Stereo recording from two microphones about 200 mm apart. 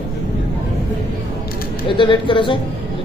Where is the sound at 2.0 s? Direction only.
25° left (ahead or behind).